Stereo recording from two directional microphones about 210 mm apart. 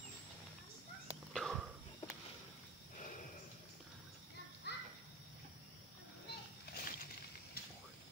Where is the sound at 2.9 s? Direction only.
40° left (ahead or behind).